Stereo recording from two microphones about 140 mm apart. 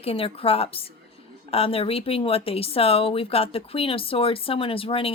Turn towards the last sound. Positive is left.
turn(degrees=40)  # may be behind; listen again after turning